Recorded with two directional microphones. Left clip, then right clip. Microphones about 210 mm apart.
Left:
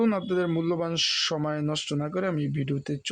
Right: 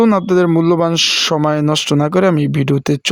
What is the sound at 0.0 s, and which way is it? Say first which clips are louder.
Speech: right 13 dB; 50° right (ahead or behind).